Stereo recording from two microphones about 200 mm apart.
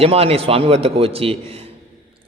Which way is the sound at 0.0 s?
30° right (ahead or behind).